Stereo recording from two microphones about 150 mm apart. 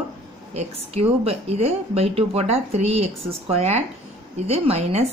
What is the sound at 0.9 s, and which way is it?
Speech, 40° right (ahead or behind).